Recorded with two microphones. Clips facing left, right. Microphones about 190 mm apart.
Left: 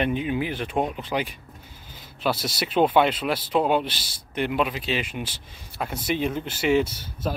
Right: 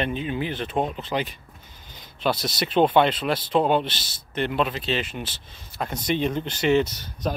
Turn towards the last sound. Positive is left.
turn(degrees=5)  # may be behind; listen again after turning